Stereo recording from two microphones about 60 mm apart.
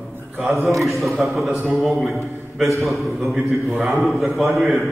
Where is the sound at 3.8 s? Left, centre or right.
Centre.